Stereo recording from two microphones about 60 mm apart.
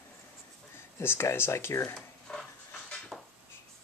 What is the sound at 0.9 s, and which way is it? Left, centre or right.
Speech, left.